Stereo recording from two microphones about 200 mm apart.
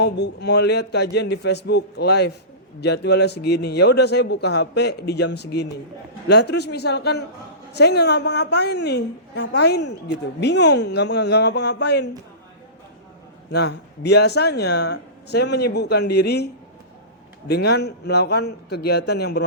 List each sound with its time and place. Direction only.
0.0 s speech: 55° left (ahead or behind)
13.5 s speech: 55° left (ahead or behind)
17.5 s speech: 55° left (ahead or behind)